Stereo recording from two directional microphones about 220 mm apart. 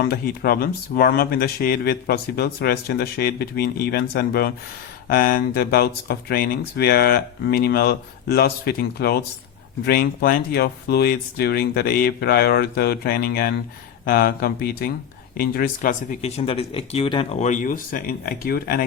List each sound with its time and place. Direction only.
0.0 s speech: 45° left (ahead or behind)